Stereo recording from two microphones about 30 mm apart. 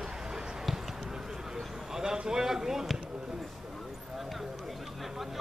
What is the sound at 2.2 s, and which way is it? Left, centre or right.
Speech, centre.